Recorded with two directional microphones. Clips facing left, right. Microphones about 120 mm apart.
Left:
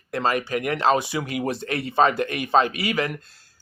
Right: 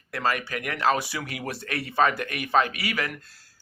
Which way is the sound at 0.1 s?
25° left (ahead or behind).